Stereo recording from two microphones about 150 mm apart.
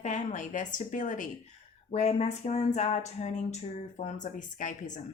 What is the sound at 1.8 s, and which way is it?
Speech, 45° left (ahead or behind).